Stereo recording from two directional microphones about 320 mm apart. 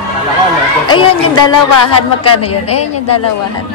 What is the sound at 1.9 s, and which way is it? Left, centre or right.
Speech, left.